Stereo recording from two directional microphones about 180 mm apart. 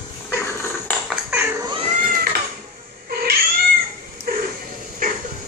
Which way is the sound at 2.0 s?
50° right (ahead or behind).